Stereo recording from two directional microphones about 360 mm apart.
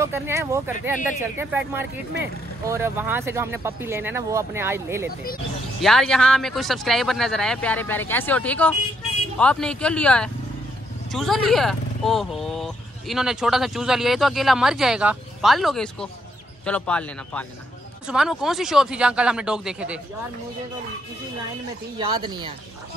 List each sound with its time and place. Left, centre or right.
0.0 s speech: centre
21.9 s speech: centre